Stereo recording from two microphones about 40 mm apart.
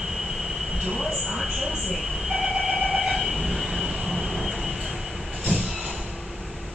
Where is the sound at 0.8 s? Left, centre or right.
Centre.